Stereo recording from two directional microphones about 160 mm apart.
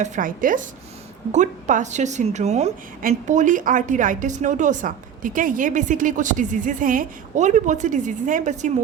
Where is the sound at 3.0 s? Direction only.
55° right (ahead or behind).